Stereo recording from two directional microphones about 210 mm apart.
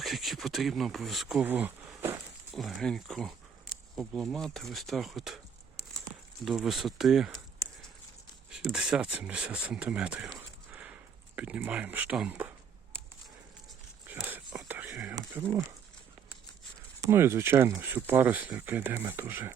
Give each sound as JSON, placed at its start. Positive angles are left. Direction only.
{"t": 0.0, "sound": "speech", "side_deg": 0}
{"t": 6.4, "sound": "speech", "side_deg": 0}
{"t": 8.4, "sound": "speech", "side_deg": -5}
{"t": 10.3, "sound": "a sound", "side_deg": -10}
{"t": 11.3, "sound": "speech", "side_deg": -5}
{"t": 14.1, "sound": "whispering", "side_deg": -10}
{"t": 15.1, "sound": "a sound", "side_deg": -15}
{"t": 17.1, "sound": "speech", "side_deg": -10}